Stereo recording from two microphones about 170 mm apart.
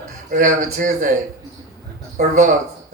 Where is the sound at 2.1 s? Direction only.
50° right (ahead or behind).